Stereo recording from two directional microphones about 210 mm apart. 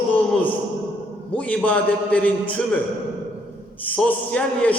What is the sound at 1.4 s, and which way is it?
Speech, 5° left (ahead or behind).